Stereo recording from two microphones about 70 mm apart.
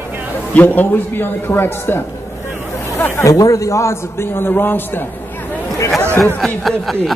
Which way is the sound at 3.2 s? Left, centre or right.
Left.